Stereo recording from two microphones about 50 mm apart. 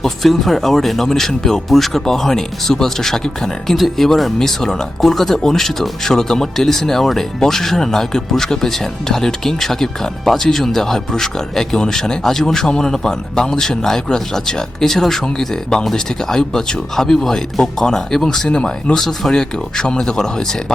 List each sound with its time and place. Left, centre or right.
0.0 s speech: centre